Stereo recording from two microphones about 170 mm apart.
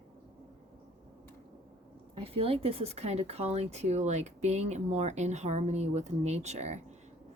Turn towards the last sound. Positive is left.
turn(degrees=-40)  # may be behind; listen again after turning